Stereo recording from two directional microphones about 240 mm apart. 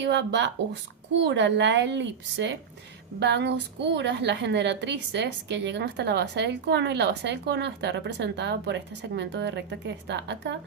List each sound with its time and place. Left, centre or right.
0.0 s a woman's voice: right